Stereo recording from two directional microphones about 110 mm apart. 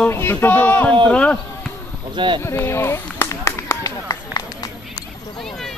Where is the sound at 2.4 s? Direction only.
25° left (ahead or behind).